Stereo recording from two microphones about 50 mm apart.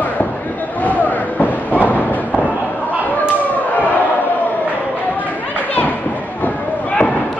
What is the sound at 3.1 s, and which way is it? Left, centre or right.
Chop, left.